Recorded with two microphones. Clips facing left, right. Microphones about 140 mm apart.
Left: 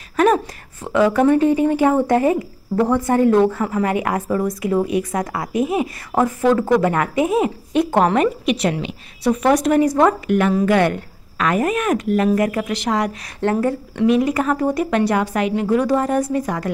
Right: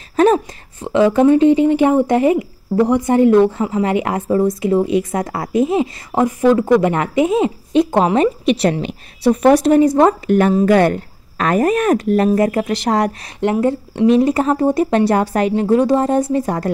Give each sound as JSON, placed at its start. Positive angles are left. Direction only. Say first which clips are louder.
{"t": 0.1, "sound": "a sound", "louder": "right 3 dB", "side_deg": -30}
{"t": 0.8, "sound": "speech", "louder": "right 3 dB", "side_deg": -25}
{"t": 13.4, "sound": "speech", "louder": "right 3 dB", "side_deg": -20}